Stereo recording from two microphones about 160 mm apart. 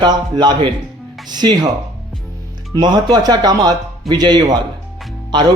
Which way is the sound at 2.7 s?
25° right (ahead or behind).